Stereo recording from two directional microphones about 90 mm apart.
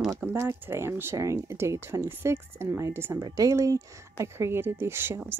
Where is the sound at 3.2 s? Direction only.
40° right (ahead or behind).